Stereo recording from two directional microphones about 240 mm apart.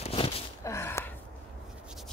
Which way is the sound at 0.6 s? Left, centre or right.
Centre.